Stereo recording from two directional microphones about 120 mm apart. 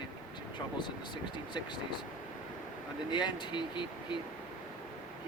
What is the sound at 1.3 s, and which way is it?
Speech, 40° left (ahead or behind).